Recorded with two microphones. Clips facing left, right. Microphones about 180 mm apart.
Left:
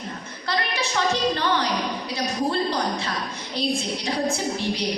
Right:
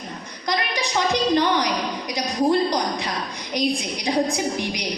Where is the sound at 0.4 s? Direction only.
15° right (ahead or behind).